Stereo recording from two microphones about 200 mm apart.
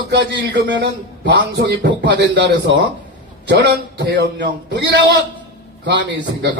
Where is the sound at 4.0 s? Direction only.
60° right (ahead or behind).